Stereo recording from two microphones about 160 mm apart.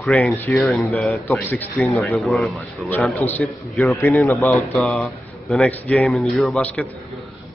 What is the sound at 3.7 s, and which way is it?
Speech, centre (ahead or behind).